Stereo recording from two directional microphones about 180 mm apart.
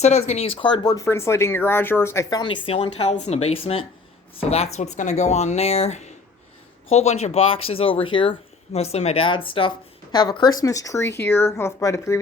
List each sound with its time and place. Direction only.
0.0 s speech: 40° left (ahead or behind); by 2.4 s 15° left (ahead or behind)
2.4 s speech: 30° left (ahead or behind)